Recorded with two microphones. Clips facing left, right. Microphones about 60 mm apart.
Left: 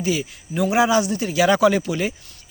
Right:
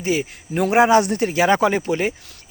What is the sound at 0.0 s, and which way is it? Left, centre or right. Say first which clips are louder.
Speech: right 1 dB; right.